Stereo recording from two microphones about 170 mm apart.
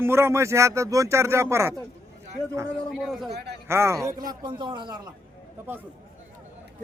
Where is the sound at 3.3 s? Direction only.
75° right (ahead or behind).